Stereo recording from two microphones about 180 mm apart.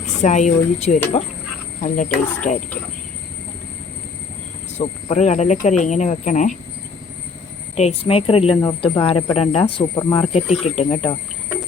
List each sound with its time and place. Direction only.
0.2 s speech: 40° left (ahead or behind)
4.8 s speech: 40° left (ahead or behind)
7.8 s speech: 35° left (ahead or behind)